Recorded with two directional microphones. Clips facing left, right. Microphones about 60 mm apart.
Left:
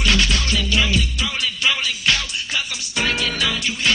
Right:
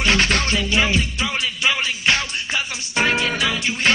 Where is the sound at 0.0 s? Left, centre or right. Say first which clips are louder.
Right 2 dB; right.